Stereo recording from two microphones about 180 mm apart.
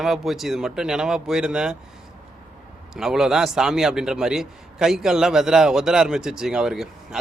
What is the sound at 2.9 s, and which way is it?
A man's voice, centre (ahead or behind).